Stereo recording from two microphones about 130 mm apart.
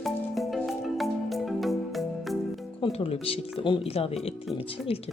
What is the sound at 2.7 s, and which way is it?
Speech, 45° left (ahead or behind).